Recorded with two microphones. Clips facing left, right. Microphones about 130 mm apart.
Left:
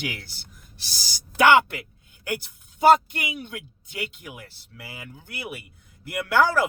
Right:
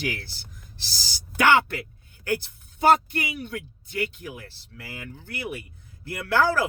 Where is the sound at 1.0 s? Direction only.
15° left (ahead or behind).